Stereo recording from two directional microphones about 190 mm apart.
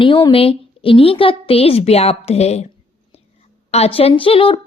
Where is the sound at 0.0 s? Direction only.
25° left (ahead or behind).